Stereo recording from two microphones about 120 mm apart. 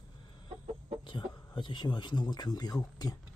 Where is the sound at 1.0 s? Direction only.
40° left (ahead or behind).